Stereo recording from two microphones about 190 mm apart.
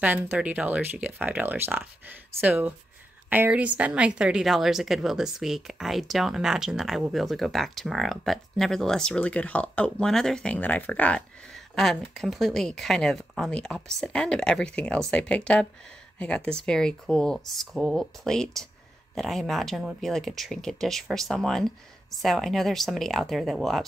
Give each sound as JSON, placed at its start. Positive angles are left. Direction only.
{"t": 0.0, "sound": "a woman's voice", "side_deg": -10}